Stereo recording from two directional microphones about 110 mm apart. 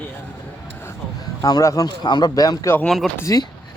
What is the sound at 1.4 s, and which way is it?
Speech, 35° left (ahead or behind).